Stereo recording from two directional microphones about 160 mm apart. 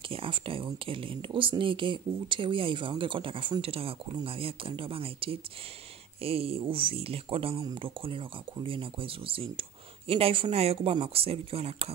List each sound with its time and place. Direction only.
0.1 s speech: 35° right (ahead or behind)